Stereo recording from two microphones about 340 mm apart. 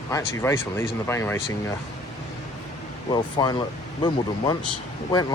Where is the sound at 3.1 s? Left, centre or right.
Centre.